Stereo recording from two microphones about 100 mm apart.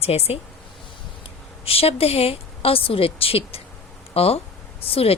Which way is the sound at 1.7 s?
75° left (ahead or behind).